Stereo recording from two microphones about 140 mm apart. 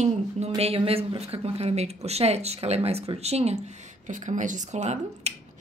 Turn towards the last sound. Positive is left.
turn(degrees=-55)  # may be behind; listen again after turning